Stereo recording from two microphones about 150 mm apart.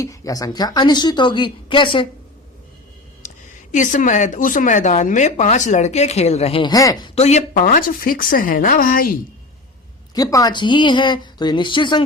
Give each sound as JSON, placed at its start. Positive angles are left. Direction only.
{"t": 0.0, "sound": "a woman's voice", "side_deg": 20}
{"t": 3.2, "sound": "a woman's voice", "side_deg": 55}
{"t": 7.2, "sound": "a woman's voice", "side_deg": 50}
{"t": 10.2, "sound": "speech", "side_deg": 25}